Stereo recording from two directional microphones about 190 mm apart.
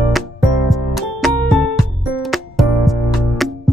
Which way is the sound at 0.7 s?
Centre (ahead or behind).